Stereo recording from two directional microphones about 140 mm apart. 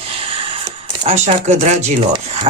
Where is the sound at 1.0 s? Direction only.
50° right (ahead or behind).